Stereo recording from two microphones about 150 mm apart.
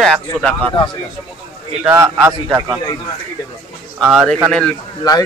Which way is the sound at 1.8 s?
15° right (ahead or behind).